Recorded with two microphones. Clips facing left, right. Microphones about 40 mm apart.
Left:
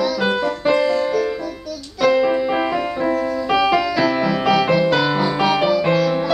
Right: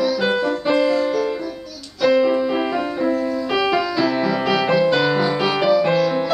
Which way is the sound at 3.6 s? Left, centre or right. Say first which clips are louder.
Left 2 dB; centre.